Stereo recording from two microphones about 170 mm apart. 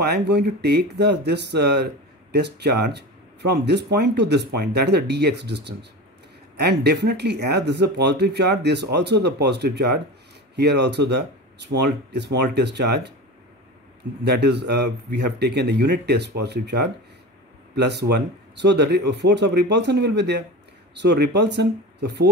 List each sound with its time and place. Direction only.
0.0 s a man's voice: 75° right (ahead or behind)
14.2 s a man's voice: 80° right